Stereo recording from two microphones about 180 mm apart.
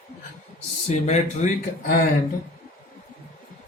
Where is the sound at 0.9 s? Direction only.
40° left (ahead or behind).